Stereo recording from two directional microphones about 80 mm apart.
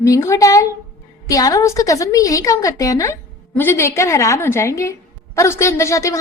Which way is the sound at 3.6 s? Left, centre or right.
Left.